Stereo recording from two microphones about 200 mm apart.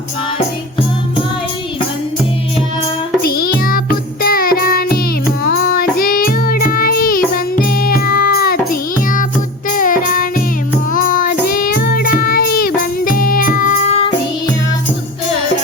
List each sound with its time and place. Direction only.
3.2 s music: 50° left (ahead or behind)
5.4 s child singing: 45° left (ahead or behind)
7.6 s music: 45° left (ahead or behind)
10.9 s child singing: 45° left (ahead or behind)